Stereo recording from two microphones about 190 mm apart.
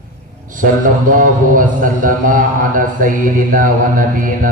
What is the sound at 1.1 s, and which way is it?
A man's voice, 45° right (ahead or behind).